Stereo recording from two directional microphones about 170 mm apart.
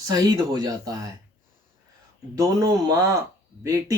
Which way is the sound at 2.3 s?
20° right (ahead or behind).